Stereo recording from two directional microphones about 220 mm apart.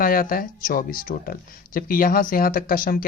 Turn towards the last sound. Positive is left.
turn(degrees=40)  # may be behind; listen again after turning